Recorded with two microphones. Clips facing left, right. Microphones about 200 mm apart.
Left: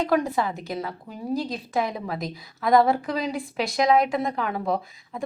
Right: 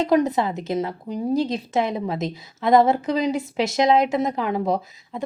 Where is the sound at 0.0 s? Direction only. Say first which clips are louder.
Right 4 dB; 20° right (ahead or behind).